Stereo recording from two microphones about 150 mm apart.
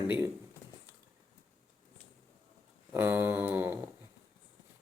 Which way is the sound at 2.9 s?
15° right (ahead or behind).